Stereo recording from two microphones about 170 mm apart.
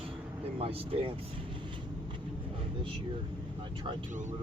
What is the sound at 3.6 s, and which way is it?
Vehicle, 30° right (ahead or behind).